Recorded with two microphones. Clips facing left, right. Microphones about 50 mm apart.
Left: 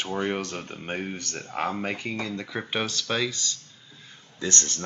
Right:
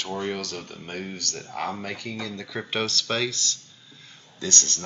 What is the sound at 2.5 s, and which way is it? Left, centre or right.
Speech, centre.